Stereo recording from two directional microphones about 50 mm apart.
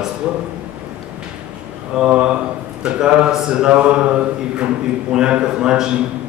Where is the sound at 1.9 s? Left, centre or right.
Centre.